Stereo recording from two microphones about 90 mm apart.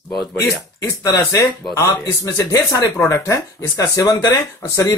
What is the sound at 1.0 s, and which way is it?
Speech, 35° left (ahead or behind).